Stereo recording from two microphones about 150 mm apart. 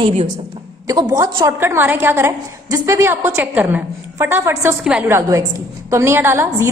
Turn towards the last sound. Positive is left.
turn(degrees=-15)  # may be behind; listen again after turning